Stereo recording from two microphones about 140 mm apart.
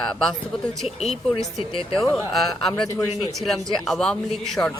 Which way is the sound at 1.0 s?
50° left (ahead or behind).